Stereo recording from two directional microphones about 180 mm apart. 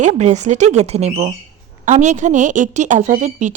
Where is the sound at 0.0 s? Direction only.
40° right (ahead or behind).